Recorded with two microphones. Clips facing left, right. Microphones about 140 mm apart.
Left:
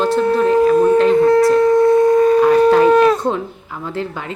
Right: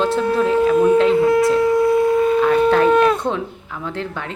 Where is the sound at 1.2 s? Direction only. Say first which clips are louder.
Left 3 dB; 25° right (ahead or behind).